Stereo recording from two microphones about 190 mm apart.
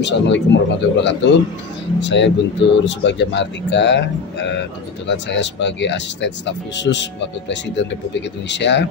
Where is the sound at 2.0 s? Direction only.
70° left (ahead or behind).